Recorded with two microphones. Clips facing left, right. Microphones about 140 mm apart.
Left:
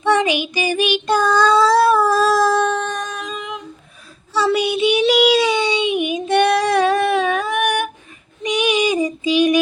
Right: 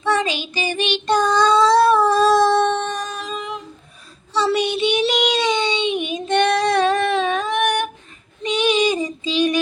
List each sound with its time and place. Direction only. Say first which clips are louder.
0.0 s child singing: left 4 dB; 15° left (ahead or behind)
8.4 s female singing: even; 10° left (ahead or behind)